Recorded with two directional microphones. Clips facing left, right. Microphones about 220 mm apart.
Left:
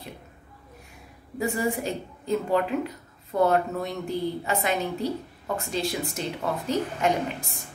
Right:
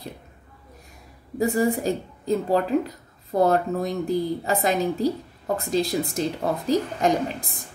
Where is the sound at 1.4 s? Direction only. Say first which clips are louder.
Right 5 dB; 35° right (ahead or behind).